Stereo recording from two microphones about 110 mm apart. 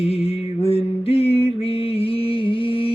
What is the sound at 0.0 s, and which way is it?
Music, 65° left (ahead or behind).